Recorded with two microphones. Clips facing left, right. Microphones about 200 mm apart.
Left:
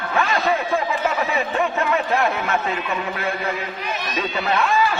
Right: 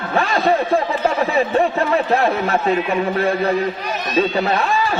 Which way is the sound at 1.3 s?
35° right (ahead or behind).